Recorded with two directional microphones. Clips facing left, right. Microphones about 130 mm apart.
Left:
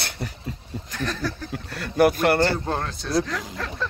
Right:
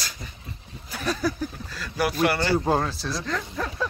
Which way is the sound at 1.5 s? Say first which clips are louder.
Left 5 dB; 60° left (ahead or behind).